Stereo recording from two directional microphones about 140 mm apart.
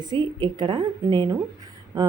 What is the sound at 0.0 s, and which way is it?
A woman's voice, 30° right (ahead or behind).